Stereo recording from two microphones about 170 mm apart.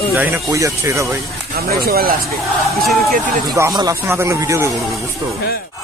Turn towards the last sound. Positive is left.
turn(degrees=-15)  # may be behind; listen again after turning